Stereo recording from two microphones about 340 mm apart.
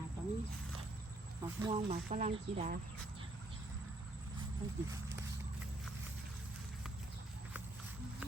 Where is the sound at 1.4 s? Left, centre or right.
Centre.